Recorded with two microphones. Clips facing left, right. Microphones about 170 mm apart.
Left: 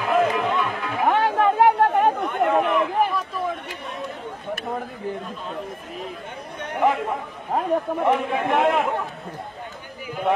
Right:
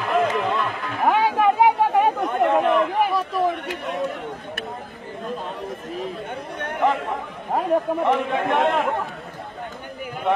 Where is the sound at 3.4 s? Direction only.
85° right.